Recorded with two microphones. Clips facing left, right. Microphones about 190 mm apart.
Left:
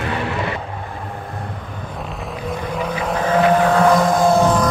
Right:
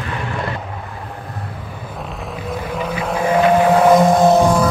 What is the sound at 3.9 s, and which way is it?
Music, 20° right (ahead or behind).